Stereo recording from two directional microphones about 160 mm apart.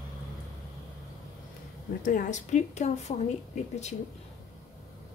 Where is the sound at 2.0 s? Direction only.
55° left (ahead or behind).